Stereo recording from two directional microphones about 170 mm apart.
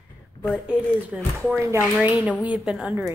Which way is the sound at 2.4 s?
5° right (ahead or behind).